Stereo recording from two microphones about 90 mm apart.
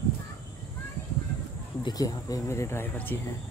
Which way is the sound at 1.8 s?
45° left (ahead or behind).